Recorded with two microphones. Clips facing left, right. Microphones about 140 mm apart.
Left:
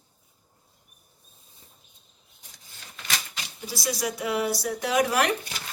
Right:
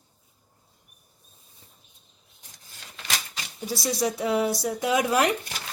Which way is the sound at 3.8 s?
25° right (ahead or behind).